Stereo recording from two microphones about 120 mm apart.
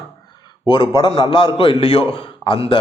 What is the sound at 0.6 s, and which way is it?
Speech, 45° left (ahead or behind).